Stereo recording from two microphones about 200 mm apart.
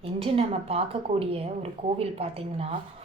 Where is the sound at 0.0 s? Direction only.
30° right (ahead or behind).